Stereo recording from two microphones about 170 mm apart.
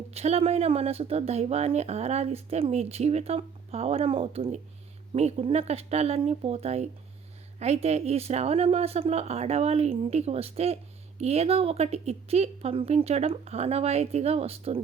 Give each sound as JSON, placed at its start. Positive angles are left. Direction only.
{"t": 0.1, "sound": "speech", "side_deg": -40}